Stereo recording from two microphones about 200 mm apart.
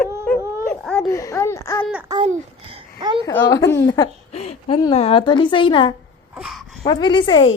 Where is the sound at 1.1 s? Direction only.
15° left (ahead or behind).